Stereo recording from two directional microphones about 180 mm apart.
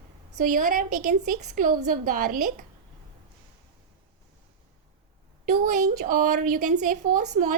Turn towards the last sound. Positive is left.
turn(degrees=-40)  # may be behind; listen again after turning